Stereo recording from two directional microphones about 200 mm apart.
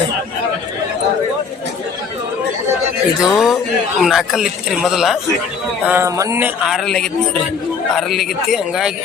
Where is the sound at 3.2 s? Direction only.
Centre (ahead or behind).